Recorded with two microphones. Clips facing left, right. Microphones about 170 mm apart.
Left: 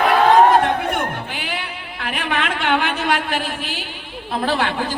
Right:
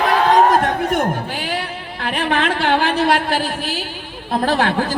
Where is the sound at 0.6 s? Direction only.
40° right (ahead or behind).